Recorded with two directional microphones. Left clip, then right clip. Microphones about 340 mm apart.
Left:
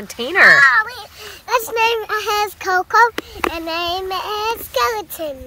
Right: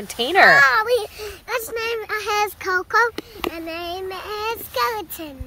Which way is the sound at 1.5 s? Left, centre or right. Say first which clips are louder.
Left 8 dB; centre.